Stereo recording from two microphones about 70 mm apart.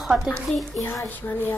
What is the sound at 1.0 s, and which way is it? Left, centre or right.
Speech, left.